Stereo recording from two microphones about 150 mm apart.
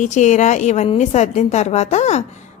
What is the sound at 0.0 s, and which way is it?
Speech, 50° left (ahead or behind).